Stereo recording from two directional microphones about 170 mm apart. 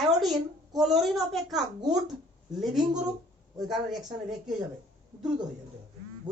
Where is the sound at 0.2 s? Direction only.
Centre (ahead or behind).